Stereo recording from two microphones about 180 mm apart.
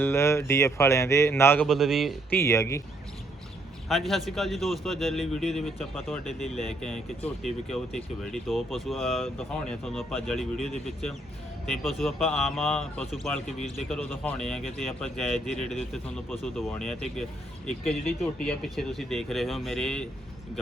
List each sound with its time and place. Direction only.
0.0 s speech: 15° left (ahead or behind)
1.6 s speech: centre (ahead or behind)
2.3 s speech: 15° left (ahead or behind)
3.8 s speech: centre (ahead or behind)